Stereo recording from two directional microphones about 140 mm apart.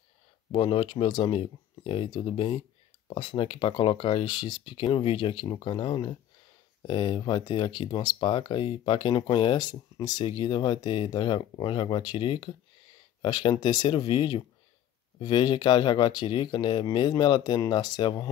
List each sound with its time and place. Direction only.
0.5 s speech: 35° left (ahead or behind)